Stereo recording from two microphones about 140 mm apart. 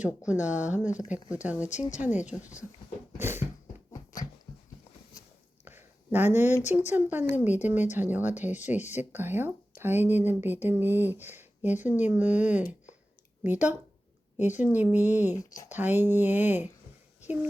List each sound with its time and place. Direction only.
0.3 s speech: 10° right (ahead or behind)
3.2 s a sound: 15° right (ahead or behind)
3.9 s dog: 25° left (ahead or behind)
5.6 s a sound: 15° right (ahead or behind)
6.7 s speech: 15° right (ahead or behind)
15.4 s speech: 25° left (ahead or behind)
15.7 s speech: 15° right (ahead or behind)